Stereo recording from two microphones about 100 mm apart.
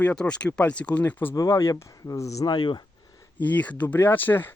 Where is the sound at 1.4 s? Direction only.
35° left (ahead or behind).